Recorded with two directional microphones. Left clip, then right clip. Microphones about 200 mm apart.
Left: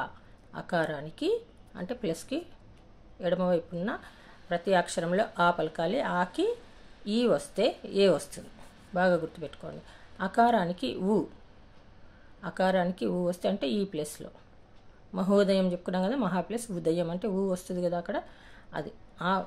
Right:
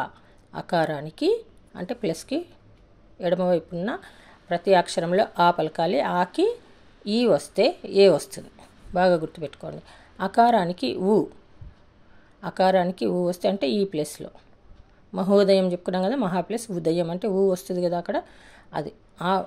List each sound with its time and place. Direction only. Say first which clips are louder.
0.0 s speech: right 5 dB; 35° right (ahead or behind)
12.4 s speech: right 7 dB; 30° right (ahead or behind)